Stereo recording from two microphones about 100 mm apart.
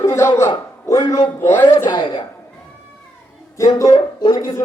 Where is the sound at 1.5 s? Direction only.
25° left (ahead or behind).